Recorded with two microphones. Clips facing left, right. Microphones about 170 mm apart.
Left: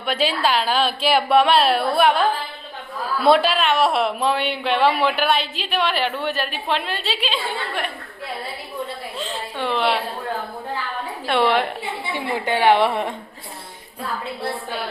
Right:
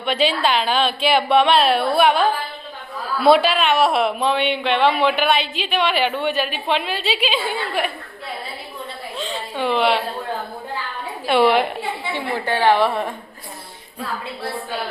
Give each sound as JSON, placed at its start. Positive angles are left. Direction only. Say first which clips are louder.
{"t": 0.0, "sound": "a woman's voice", "louder": "right 2 dB", "side_deg": 5}
{"t": 3.2, "sound": "a woman's voice", "louder": "right 2 dB", "side_deg": 0}
{"t": 9.1, "sound": "a sound", "louder": "right 3 dB", "side_deg": 0}
{"t": 11.3, "sound": "a woman's voice", "louder": "right 3 dB", "side_deg": -5}
{"t": 12.1, "sound": "a woman's voice", "louder": "left 1 dB", "side_deg": 15}